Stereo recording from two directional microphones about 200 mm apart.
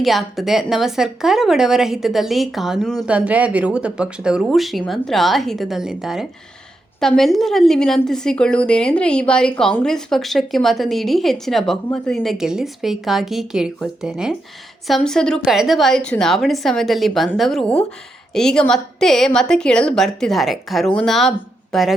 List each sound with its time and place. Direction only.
0.0 s a woman's voice: centre (ahead or behind)